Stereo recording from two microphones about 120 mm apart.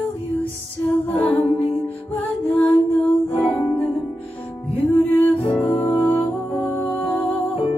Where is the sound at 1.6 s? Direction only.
15° left (ahead or behind).